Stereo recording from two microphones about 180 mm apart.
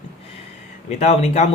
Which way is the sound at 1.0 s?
40° left (ahead or behind).